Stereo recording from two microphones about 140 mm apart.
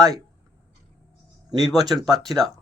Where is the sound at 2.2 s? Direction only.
Centre (ahead or behind).